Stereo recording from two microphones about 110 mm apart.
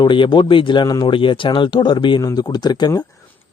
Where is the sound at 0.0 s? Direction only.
45° left (ahead or behind).